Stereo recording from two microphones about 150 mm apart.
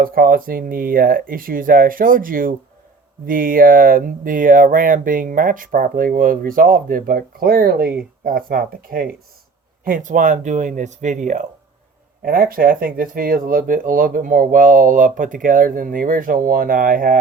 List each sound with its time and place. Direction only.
0.0 s speech: 75° right (ahead or behind)
9.8 s speech: 65° right (ahead or behind)
12.2 s speech: 70° right (ahead or behind)